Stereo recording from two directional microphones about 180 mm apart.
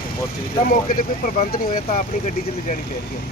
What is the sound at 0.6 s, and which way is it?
Speech, 50° left (ahead or behind).